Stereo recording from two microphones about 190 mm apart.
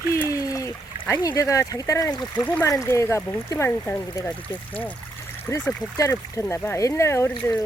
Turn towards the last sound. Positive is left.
turn(degrees=15)  # may be behind; listen again after turning